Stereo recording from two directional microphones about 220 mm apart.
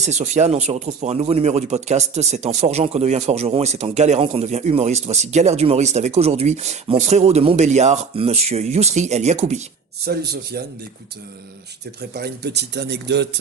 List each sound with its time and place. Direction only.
0.0 s speech: 30° right (ahead or behind)
10.1 s a man's voice: 45° right (ahead or behind)
12.1 s a man's voice: 45° right (ahead or behind)